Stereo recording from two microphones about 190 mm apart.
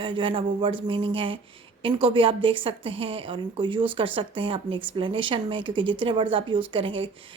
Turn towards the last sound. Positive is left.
turn(degrees=-25)  # may be behind; listen again after turning